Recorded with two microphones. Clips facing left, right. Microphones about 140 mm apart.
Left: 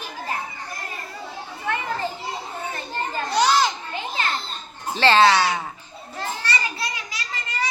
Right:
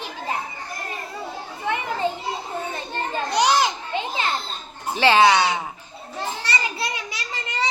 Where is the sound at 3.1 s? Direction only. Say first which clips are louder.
Even; 15° right (ahead or behind).